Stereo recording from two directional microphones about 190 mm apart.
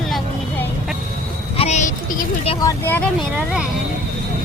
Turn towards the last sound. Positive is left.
turn(degrees=10)  # may be behind; listen again after turning